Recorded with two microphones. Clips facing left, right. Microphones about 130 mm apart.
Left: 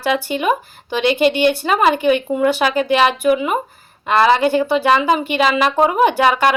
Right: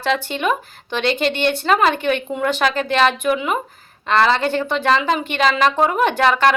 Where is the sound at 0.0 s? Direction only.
10° left (ahead or behind).